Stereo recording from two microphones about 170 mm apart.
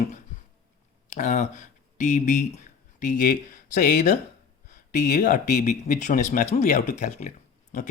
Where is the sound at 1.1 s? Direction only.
45° left (ahead or behind).